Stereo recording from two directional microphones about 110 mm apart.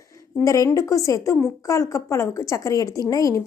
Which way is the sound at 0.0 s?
30° left (ahead or behind).